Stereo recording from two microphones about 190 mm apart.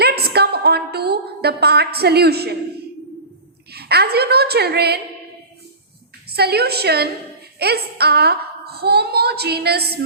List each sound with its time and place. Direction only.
0.0 s a sound: 55° right (ahead or behind)
3.7 s a woman's voice: 55° right (ahead or behind)
6.2 s a woman's voice: 55° right (ahead or behind)